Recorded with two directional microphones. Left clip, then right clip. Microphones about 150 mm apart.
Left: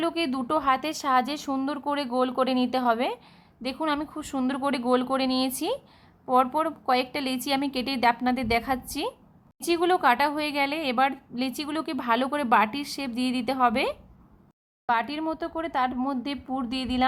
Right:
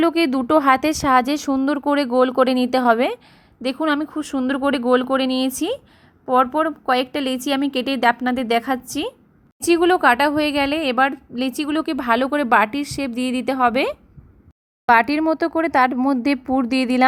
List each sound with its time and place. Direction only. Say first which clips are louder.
0.0 s a woman's voice: right 9 dB; 35° right (ahead or behind)
14.8 s speech: right 11 dB; 50° right (ahead or behind)